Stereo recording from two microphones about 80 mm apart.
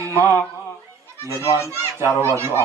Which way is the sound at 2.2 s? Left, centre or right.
Right.